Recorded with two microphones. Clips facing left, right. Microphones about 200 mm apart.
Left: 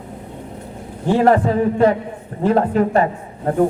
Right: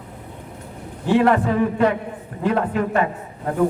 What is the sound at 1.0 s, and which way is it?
A man's voice, 35° left (ahead or behind).